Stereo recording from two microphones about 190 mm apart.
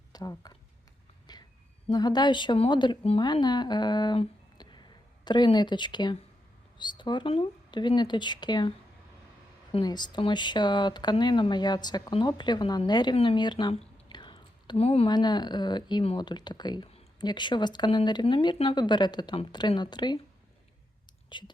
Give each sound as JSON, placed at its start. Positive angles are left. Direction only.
{"t": 0.1, "sound": "a sound", "side_deg": 20}
{"t": 1.9, "sound": "speech", "side_deg": 20}
{"t": 9.7, "sound": "speech", "side_deg": 20}
{"t": 21.2, "sound": "speech", "side_deg": 25}